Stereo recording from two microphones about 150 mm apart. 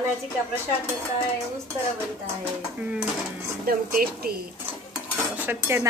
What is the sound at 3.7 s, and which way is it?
Speech, 80° right.